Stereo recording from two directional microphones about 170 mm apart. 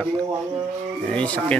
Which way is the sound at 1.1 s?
5° left (ahead or behind).